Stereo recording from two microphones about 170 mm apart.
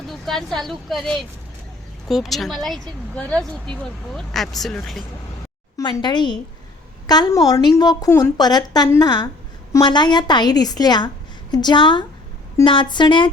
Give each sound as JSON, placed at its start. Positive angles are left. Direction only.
{"t": 0.1, "sound": "speech", "side_deg": 0}
{"t": 5.7, "sound": "a woman's voice", "side_deg": 25}